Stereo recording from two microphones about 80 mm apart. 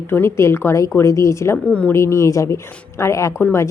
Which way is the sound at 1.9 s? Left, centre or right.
Left.